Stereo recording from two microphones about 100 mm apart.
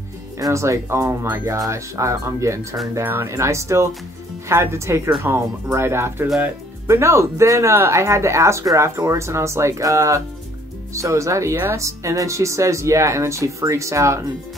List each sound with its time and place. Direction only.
0.4 s speech: 30° right (ahead or behind)